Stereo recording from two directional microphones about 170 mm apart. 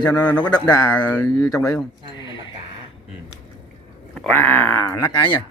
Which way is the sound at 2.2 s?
25° left (ahead or behind).